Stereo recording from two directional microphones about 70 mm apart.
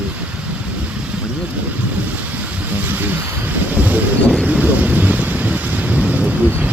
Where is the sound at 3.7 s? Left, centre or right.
Right.